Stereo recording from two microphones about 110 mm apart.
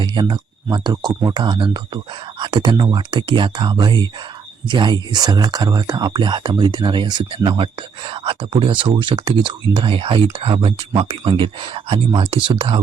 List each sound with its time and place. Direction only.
0.0 s speech: 40° right (ahead or behind)